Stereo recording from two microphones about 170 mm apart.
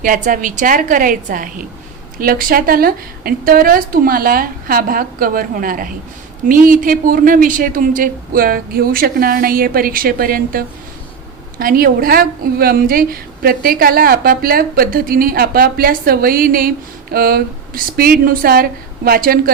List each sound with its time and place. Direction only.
0.0 s a woman's voice: 55° right (ahead or behind)